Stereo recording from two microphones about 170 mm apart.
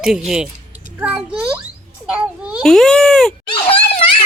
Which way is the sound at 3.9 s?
30° left (ahead or behind).